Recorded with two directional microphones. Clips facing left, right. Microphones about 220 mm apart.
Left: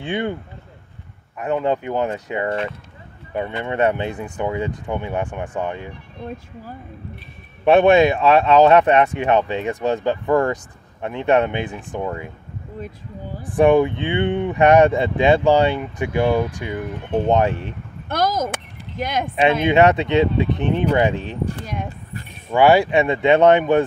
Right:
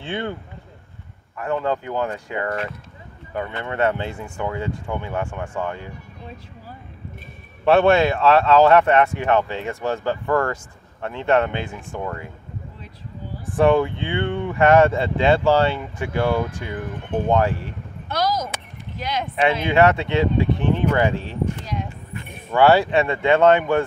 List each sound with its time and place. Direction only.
0.0 s speech: 15° left (ahead or behind)
1.4 s speech: 20° left (ahead or behind)
7.6 s speech: 15° left (ahead or behind)
13.4 s speech: 15° left (ahead or behind)
18.0 s a sound: 50° left (ahead or behind)
19.6 s speech: 20° left (ahead or behind)
22.5 s speech: 15° left (ahead or behind)